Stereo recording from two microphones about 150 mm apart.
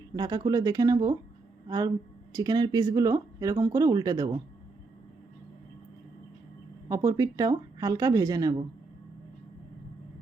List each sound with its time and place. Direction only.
0.2 s speech: 25° right (ahead or behind)
6.8 s speech: 20° right (ahead or behind)